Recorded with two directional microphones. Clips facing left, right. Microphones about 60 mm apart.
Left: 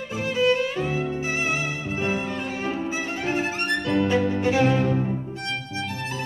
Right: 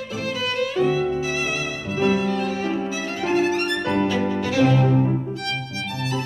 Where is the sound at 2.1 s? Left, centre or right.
Left.